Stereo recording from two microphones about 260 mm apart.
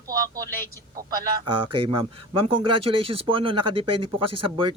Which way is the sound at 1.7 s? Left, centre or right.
Centre.